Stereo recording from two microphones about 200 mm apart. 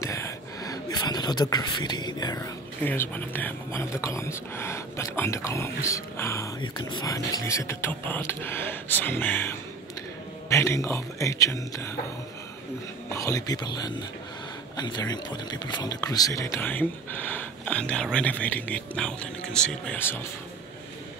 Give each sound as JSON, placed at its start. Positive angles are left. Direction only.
{"t": 0.0, "sound": "speech", "side_deg": 15}
{"t": 13.1, "sound": "speech", "side_deg": 15}